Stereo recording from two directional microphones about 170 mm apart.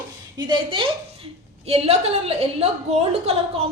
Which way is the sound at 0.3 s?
25° right (ahead or behind).